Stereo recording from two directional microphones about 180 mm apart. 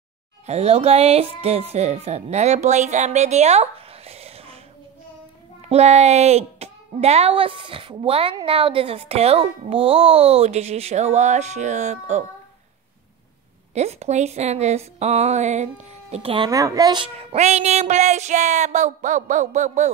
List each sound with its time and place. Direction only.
0.5 s speech: 35° right (ahead or behind)
5.6 s speech: 35° right (ahead or behind)
13.7 s speech: 40° right (ahead or behind)
16.4 s speech: 20° right (ahead or behind); by 19.9 s 40° right (ahead or behind)